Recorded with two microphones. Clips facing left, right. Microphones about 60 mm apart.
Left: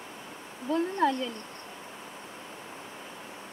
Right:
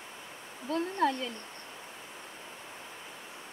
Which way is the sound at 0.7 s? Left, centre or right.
Centre.